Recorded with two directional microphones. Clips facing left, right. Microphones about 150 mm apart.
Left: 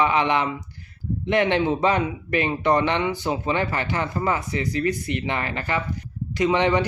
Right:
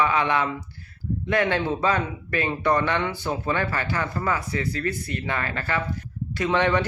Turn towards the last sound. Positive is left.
turn(degrees=15)  # may be behind; listen again after turning